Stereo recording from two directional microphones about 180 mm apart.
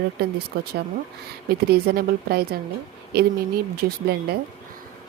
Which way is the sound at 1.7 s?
60° right (ahead or behind).